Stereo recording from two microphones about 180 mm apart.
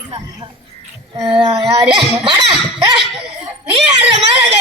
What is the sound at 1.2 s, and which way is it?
Child singing, 30° right (ahead or behind).